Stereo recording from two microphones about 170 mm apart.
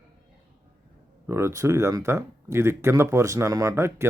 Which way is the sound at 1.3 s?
15° right (ahead or behind).